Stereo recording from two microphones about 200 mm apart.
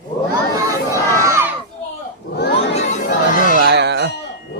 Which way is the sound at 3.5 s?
55° right (ahead or behind).